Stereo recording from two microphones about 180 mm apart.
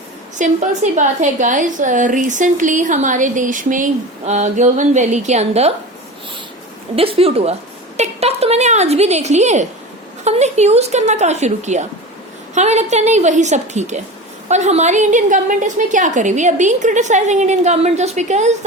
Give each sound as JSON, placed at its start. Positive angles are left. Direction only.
{"t": 0.3, "sound": "a woman's voice", "side_deg": -45}
{"t": 6.9, "sound": "a woman's voice", "side_deg": -30}